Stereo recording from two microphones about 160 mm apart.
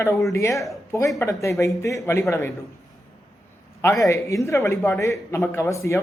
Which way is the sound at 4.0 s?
20° left (ahead or behind).